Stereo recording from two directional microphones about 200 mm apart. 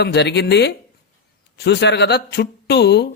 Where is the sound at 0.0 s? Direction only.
55° left (ahead or behind).